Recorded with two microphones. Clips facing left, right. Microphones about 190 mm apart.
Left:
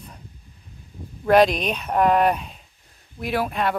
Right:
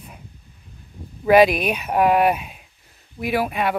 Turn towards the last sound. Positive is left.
turn(degrees=-5)  # may be behind; listen again after turning